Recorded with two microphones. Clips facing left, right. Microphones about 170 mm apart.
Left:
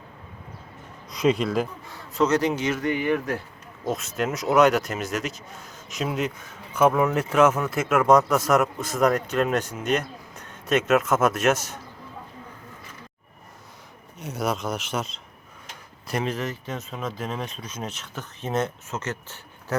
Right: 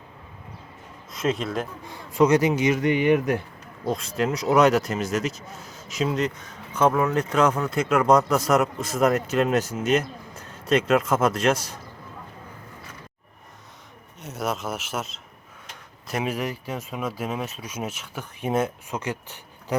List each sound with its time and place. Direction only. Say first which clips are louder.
1.1 s speech: left 4 dB; centre (ahead or behind)
1.9 s speech: right 5 dB; 10° right (ahead or behind)
3.8 s speech: right 2 dB; 5° left (ahead or behind)
14.2 s speech: left 2 dB; centre (ahead or behind)